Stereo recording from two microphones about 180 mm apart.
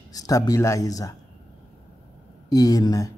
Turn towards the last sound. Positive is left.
turn(degrees=20)  # may be behind; listen again after turning